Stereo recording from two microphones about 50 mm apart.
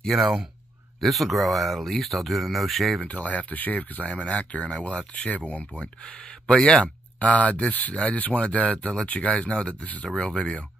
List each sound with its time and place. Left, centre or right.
0.1 s speech: centre
3.1 s speech: left
7.2 s speech: left